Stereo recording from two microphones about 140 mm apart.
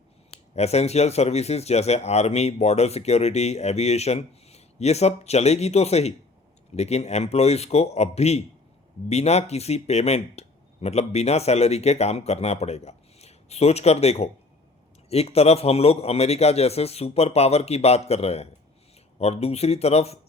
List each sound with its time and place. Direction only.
0.3 s speech: 50° left (ahead or behind)